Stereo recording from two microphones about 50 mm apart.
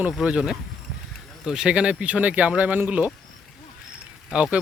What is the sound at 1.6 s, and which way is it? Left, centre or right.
Speech, right.